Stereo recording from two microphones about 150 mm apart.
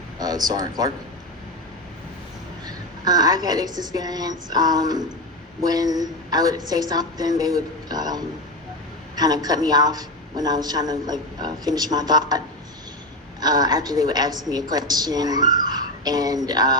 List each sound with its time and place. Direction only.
0.2 s speech: 25° right (ahead or behind)
2.6 s a man's voice: 25° right (ahead or behind)
13.4 s a man's voice: 25° right (ahead or behind)